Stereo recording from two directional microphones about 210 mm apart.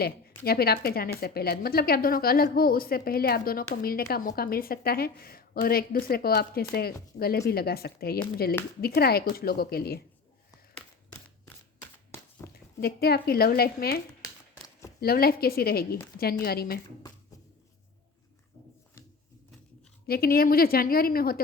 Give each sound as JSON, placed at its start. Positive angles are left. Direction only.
{"t": 0.0, "sound": "a woman's voice", "side_deg": 50}
{"t": 12.4, "sound": "a sound", "side_deg": 10}
{"t": 12.8, "sound": "a woman's voice", "side_deg": 50}
{"t": 15.0, "sound": "a woman's voice", "side_deg": 45}
{"t": 20.1, "sound": "a woman's voice", "side_deg": 45}